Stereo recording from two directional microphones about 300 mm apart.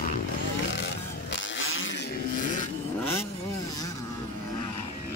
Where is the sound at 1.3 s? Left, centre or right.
Left.